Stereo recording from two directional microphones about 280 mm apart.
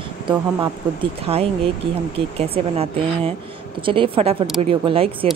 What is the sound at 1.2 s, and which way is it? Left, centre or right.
Speech, right.